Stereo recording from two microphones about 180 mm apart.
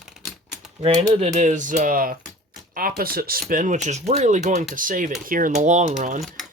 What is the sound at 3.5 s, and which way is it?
Speech, 45° right (ahead or behind).